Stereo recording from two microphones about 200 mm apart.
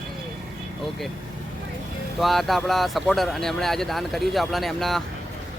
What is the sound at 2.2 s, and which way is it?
Speech, centre (ahead or behind).